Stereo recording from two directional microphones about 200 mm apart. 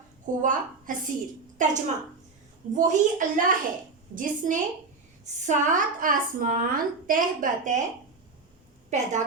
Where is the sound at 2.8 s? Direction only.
40° right (ahead or behind).